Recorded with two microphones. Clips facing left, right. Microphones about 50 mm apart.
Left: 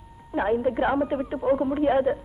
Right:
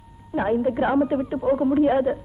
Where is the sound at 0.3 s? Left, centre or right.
Centre.